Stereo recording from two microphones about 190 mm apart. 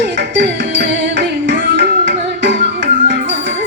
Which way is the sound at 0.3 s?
70° right (ahead or behind).